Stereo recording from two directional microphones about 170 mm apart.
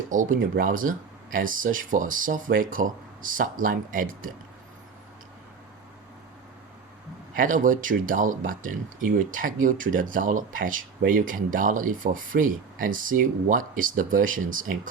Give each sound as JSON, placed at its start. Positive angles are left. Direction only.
{"t": 0.1, "sound": "speech", "side_deg": -50}
{"t": 7.3, "sound": "speech", "side_deg": -50}